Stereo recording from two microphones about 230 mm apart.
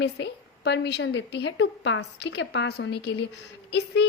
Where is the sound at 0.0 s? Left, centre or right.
Left.